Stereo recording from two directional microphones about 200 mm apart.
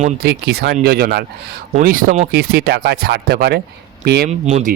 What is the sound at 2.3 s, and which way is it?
Speech, 50° right (ahead or behind).